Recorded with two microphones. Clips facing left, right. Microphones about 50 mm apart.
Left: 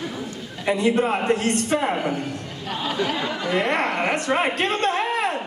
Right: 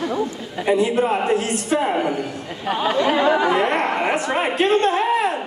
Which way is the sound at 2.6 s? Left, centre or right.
Right.